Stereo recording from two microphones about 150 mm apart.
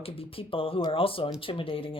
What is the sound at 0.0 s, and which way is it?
Speech, 40° left (ahead or behind).